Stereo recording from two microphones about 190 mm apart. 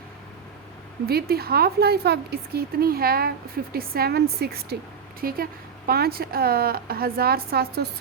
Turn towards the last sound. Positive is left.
turn(degrees=-55)  # may be behind; listen again after turning